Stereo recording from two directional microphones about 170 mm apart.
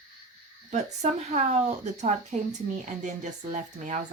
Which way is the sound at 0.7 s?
40° right (ahead or behind).